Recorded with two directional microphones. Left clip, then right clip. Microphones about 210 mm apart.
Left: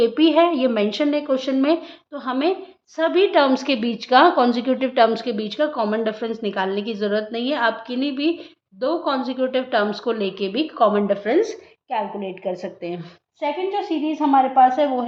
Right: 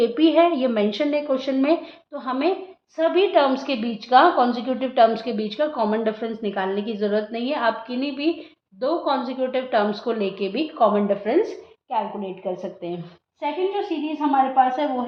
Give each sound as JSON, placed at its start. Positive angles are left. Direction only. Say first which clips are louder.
{"t": 0.0, "sound": "a woman's voice", "louder": "left 1 dB", "side_deg": 20}
{"t": 13.4, "sound": "a woman's voice", "louder": "left 1 dB", "side_deg": 35}